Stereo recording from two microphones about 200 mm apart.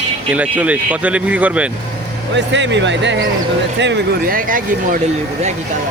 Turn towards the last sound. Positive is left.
turn(degrees=-45)  # may be behind; listen again after turning